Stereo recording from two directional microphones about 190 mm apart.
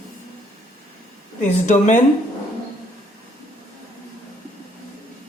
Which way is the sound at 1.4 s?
40° left (ahead or behind).